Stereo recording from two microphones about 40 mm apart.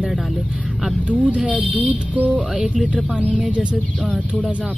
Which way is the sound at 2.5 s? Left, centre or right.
Right.